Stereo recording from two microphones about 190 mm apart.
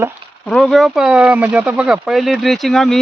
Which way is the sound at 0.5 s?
Centre (ahead or behind).